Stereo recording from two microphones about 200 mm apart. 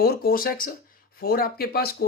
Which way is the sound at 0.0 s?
50° left (ahead or behind).